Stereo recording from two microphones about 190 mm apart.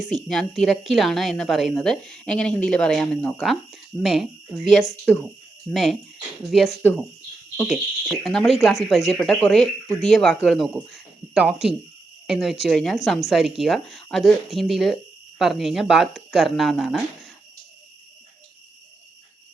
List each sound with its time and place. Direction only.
0.2 s a woman's voice: centre (ahead or behind)
4.8 s speech: 20° left (ahead or behind)
5.7 s a woman's voice: centre (ahead or behind)
8.2 s a woman's voice: centre (ahead or behind)